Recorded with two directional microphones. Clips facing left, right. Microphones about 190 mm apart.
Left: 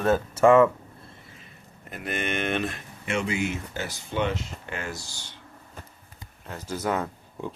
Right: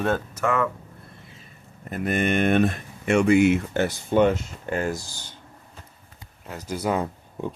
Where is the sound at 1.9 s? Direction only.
50° right (ahead or behind).